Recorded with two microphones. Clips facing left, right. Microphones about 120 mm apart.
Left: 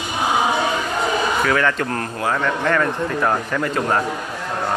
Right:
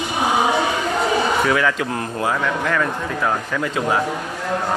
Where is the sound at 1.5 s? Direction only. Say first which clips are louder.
Even; 10° right (ahead or behind).